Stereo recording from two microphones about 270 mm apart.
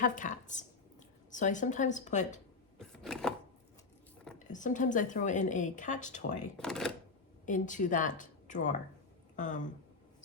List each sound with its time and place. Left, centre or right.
0.0 s speech: left
2.7 s a sound: centre
4.5 s speech: left
6.6 s speech: centre
7.4 s a woman's voice: left